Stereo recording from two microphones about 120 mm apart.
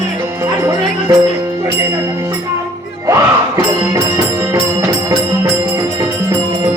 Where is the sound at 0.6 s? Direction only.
30° right (ahead or behind).